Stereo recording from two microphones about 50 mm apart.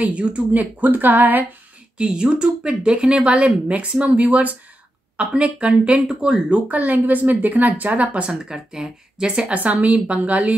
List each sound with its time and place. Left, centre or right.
0.0 s a woman's voice: right
2.0 s a woman's voice: centre
6.0 s speech: centre
6.7 s a woman's voice: right